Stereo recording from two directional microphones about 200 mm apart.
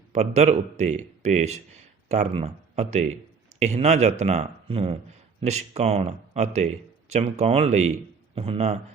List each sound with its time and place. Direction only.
0.1 s speech: 35° right (ahead or behind)